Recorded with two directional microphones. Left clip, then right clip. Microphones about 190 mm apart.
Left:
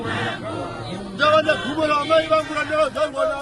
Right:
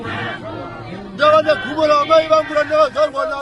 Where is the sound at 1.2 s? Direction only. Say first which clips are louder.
Right 4 dB; 25° right (ahead or behind).